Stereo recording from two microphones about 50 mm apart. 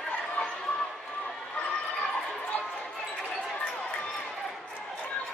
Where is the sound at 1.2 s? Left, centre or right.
Left.